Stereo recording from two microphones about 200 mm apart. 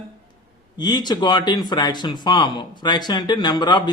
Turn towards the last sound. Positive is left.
turn(degrees=20)  # may be behind; listen again after turning